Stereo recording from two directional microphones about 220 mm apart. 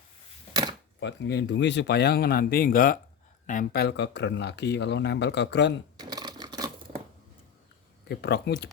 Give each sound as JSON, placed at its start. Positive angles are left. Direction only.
{"t": 0.9, "sound": "speech", "side_deg": 55}
{"t": 6.0, "sound": "a sound", "side_deg": -20}
{"t": 8.0, "sound": "speech", "side_deg": 45}